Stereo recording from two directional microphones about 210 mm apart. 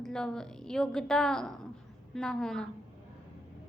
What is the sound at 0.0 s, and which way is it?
A woman's voice, 5° left (ahead or behind).